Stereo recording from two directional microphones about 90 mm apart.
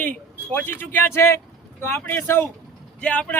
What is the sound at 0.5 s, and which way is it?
A man's voice, 20° left (ahead or behind).